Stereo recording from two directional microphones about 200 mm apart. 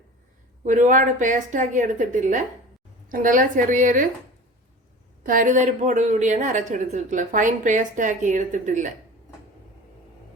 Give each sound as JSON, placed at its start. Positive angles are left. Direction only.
{"t": 0.6, "sound": "a woman's voice", "side_deg": -40}
{"t": 5.2, "sound": "a woman's voice", "side_deg": -40}